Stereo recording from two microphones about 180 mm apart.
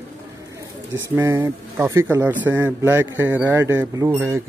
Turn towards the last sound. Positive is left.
turn(degrees=-15)  # may be behind; listen again after turning